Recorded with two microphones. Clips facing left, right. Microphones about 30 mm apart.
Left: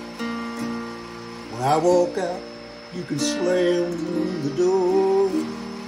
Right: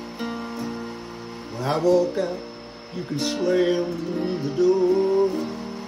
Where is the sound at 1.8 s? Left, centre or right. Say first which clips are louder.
Right 1 dB; left.